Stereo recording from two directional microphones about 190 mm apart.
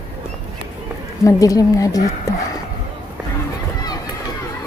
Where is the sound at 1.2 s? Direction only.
15° left (ahead or behind).